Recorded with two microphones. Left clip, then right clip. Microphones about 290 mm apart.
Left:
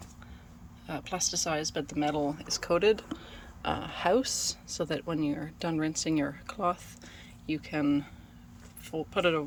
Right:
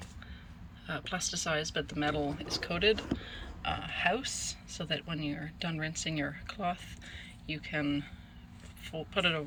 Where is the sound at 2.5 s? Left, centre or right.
Left.